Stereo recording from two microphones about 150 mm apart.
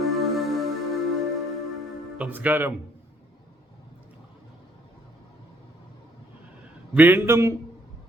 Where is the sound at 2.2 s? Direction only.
10° right (ahead or behind).